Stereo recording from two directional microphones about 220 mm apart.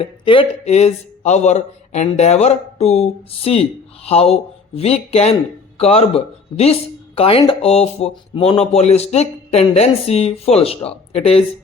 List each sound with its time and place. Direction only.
0.0 s speech: 25° left (ahead or behind)